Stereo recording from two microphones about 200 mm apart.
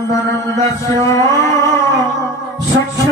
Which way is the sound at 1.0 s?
15° left (ahead or behind).